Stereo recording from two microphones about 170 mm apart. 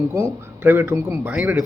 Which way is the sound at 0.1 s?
15° right (ahead or behind).